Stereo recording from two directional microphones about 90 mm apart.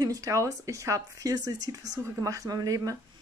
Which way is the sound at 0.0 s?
40° right (ahead or behind).